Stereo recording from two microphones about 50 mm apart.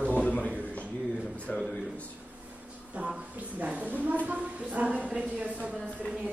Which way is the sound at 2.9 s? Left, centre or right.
Centre.